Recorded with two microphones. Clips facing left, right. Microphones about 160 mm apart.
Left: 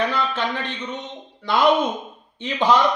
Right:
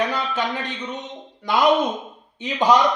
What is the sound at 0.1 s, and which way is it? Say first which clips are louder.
Speech: left 1 dB; 15° right (ahead or behind).